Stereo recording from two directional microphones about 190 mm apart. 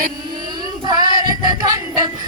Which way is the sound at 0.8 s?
20° right (ahead or behind).